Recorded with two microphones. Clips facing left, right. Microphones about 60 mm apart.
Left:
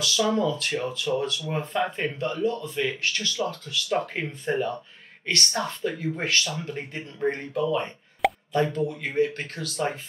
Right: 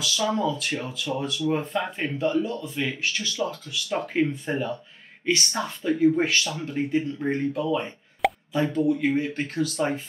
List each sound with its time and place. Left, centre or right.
0.0 s speech: centre